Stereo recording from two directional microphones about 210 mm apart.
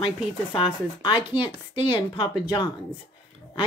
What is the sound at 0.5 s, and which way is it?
A woman's voice, 25° left (ahead or behind).